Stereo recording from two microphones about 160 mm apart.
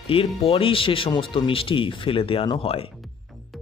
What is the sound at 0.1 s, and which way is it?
Speech, 35° left (ahead or behind).